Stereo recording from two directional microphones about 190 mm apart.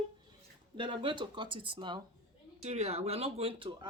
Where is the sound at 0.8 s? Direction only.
25° right (ahead or behind).